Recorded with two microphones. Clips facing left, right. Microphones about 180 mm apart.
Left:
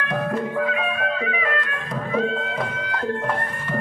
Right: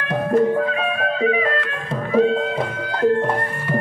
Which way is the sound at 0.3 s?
35° right (ahead or behind).